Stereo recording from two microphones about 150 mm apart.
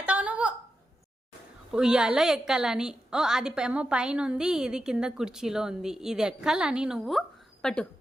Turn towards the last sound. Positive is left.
turn(degrees=5)  # may be behind; listen again after turning